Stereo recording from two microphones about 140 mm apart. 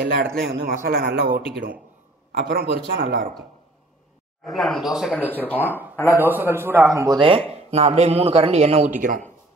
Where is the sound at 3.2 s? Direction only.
75° right (ahead or behind).